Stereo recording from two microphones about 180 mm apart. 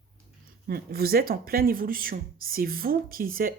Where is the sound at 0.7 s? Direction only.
55° right (ahead or behind).